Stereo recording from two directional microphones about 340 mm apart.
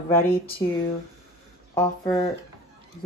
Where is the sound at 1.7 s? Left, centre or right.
Centre.